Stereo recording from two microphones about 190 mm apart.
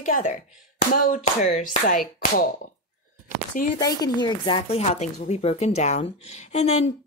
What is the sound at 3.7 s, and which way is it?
Speech, 20° left (ahead or behind).